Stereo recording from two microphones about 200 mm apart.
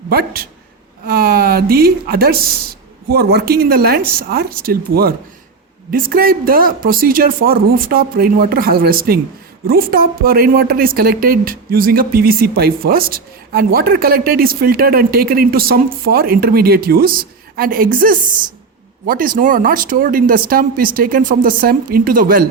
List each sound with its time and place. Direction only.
0.1 s speech: 50° right (ahead or behind)